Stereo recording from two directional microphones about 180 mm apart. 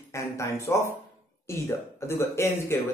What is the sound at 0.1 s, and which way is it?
Speech, 15° left (ahead or behind).